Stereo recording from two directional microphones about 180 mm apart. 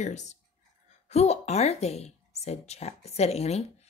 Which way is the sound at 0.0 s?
40° left (ahead or behind).